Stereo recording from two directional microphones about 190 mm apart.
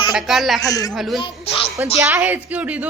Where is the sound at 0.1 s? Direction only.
Centre (ahead or behind).